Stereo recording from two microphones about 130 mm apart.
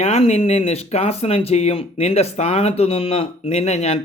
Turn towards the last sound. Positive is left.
turn(degrees=55)  # may be behind; listen again after turning